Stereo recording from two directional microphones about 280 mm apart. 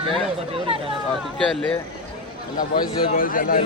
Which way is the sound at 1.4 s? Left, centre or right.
Centre.